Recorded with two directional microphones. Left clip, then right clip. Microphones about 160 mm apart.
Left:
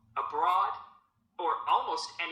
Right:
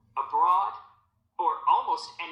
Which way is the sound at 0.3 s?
35° left (ahead or behind).